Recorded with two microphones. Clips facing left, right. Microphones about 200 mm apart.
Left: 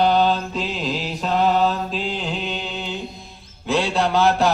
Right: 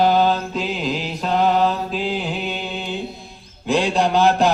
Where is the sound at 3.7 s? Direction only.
15° right (ahead or behind).